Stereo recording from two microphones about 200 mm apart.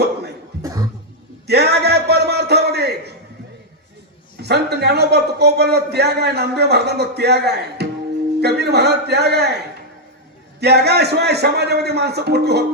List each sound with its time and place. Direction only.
0.6 s a sound: 20° right (ahead or behind)
1.5 s a man's voice: 55° right (ahead or behind)
4.4 s a man's voice: 55° right (ahead or behind)
10.6 s a man's voice: 55° right (ahead or behind)